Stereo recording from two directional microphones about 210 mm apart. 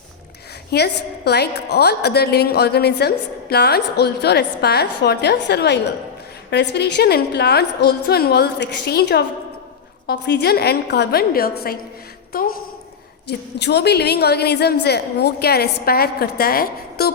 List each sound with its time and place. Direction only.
0.7 s a woman's voice: 50° left (ahead or behind)